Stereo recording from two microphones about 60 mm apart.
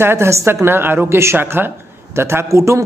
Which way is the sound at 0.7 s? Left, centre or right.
Right.